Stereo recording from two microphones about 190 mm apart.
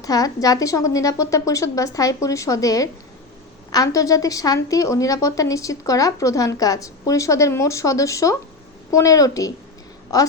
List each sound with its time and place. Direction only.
0.0 s a woman's voice: 20° left (ahead or behind)